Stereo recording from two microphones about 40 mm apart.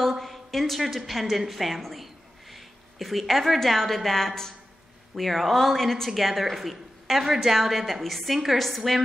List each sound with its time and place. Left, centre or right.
0.0 s a woman's voice: centre